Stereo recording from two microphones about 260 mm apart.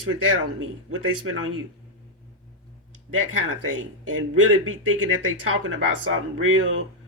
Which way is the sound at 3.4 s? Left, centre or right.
Right.